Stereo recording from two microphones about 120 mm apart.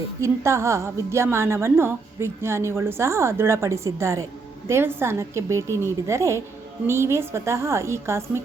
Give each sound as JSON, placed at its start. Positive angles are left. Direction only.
{"t": 0.2, "sound": "a woman's voice", "side_deg": -25}